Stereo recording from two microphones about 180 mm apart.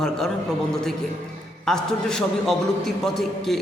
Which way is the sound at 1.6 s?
5° left (ahead or behind).